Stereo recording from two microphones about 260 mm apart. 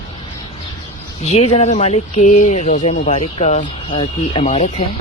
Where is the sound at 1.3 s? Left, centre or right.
Left.